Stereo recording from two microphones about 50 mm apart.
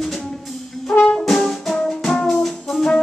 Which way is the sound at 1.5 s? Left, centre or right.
Centre.